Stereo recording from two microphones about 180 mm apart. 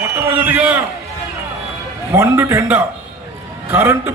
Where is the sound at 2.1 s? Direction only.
15° right (ahead or behind).